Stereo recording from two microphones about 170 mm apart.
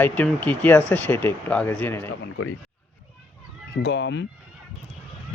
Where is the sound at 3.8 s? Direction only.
85° left.